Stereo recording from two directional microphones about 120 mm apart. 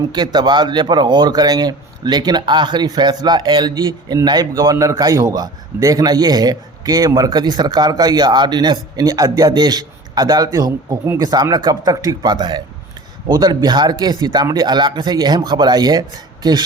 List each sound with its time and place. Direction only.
0.1 s speech: 35° right (ahead or behind)